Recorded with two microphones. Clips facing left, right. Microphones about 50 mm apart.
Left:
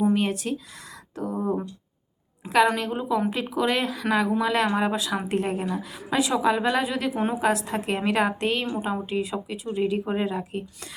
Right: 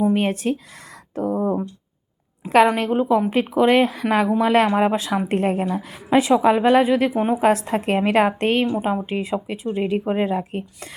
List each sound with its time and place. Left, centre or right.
0.0 s speech: right
2.7 s speech: right
7.1 s a woman's voice: centre
7.4 s speech: right
8.7 s a woman's voice: right